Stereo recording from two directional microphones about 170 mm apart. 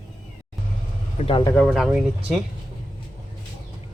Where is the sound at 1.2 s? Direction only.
30° left (ahead or behind).